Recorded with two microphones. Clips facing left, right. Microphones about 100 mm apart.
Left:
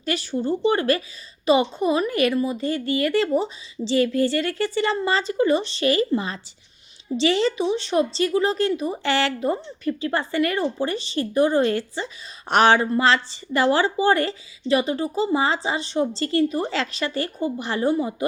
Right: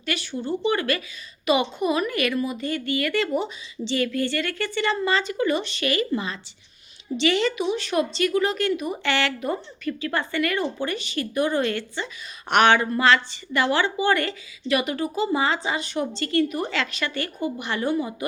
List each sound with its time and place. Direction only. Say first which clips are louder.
0.0 s a woman's voice: left 4 dB; 35° left (ahead or behind)